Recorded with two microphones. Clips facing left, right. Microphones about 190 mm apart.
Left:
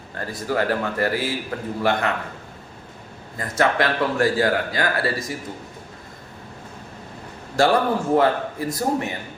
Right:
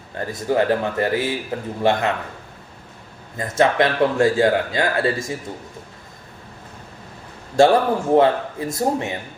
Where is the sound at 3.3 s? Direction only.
20° right (ahead or behind).